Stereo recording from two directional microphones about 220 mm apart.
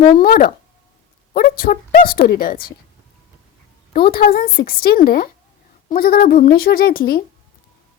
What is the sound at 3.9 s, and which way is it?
A woman's voice, 45° left (ahead or behind).